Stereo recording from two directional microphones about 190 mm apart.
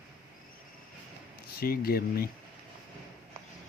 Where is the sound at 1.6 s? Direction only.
50° left (ahead or behind).